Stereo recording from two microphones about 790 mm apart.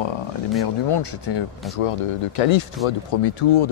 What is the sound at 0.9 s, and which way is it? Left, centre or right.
Speech, left.